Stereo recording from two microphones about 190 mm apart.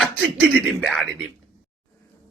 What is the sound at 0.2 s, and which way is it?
Speech, centre (ahead or behind).